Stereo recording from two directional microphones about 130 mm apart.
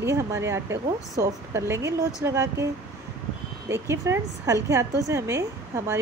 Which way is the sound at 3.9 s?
20° right (ahead or behind).